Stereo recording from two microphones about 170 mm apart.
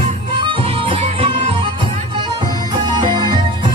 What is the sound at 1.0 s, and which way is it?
Music, 40° right (ahead or behind).